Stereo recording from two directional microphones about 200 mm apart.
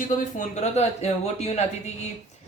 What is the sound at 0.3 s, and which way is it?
Speech, 35° left (ahead or behind).